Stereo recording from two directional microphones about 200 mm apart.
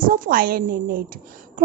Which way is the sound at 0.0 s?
45° right (ahead or behind).